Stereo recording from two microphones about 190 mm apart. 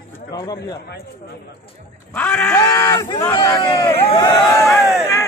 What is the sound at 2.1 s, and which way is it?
A man's voice, 5° left (ahead or behind).